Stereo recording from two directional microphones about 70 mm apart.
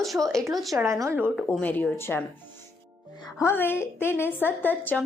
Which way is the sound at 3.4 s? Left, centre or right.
Left.